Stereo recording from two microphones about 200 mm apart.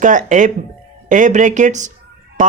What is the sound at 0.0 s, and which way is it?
Speech, 40° right (ahead or behind).